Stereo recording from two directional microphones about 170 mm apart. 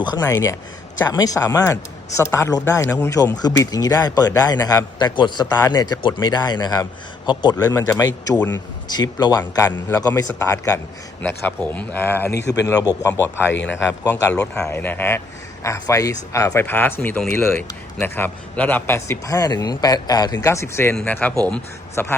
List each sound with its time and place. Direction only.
0.0 s a man's voice: 25° left (ahead or behind)
11.2 s a man's voice: 10° left (ahead or behind)
12.3 s a man's voice: 90° left
13.0 s a man's voice: 20° left (ahead or behind)
14.1 s a man's voice: 5° left (ahead or behind)